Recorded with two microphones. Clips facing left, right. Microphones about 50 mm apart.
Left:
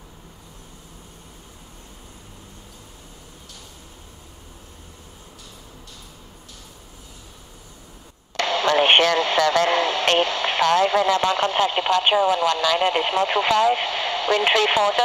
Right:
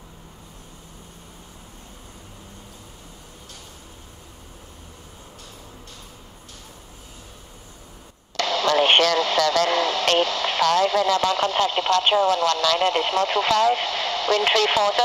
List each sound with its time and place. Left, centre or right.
8.4 s speech: left